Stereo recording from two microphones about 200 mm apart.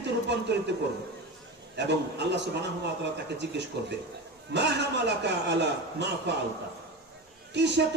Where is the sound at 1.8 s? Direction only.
60° right (ahead or behind).